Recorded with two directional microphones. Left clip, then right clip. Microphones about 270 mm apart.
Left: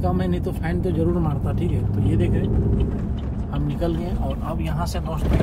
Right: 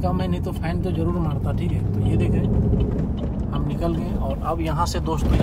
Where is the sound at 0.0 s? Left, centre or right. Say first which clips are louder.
Left 1 dB; centre.